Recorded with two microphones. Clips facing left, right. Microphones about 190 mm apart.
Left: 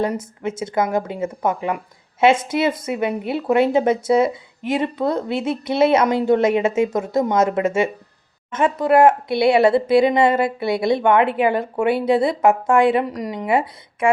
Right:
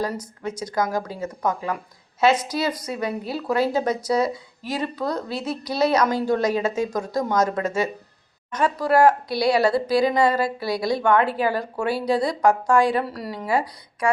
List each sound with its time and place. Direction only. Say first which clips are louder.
0.0 s a woman's voice: left 5 dB; 25° left (ahead or behind)